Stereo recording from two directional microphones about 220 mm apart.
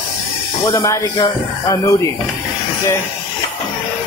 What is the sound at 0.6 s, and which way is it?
Speech, 15° left (ahead or behind).